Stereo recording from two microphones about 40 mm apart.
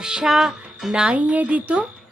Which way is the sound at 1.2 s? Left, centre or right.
Right.